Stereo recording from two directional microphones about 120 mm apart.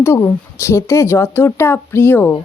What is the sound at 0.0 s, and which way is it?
Speech, 20° left (ahead or behind).